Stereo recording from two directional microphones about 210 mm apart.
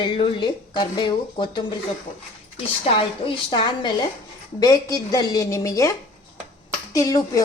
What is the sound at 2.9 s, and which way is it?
Speech, 25° left (ahead or behind).